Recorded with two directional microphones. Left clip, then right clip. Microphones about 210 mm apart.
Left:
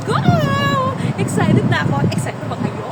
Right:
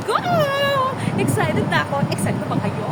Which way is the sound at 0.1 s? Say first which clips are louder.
Even; 5° right (ahead or behind).